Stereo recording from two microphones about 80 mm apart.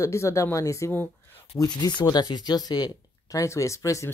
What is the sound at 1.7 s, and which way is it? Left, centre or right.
Speech, left.